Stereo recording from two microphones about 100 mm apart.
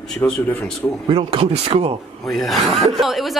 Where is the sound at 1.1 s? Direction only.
65° right (ahead or behind); by 1.9 s 85° right.